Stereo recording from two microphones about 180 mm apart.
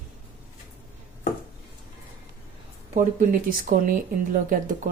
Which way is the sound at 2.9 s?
45° right (ahead or behind).